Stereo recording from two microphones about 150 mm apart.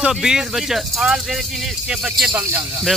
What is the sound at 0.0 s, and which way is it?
Speech, 5° right (ahead or behind).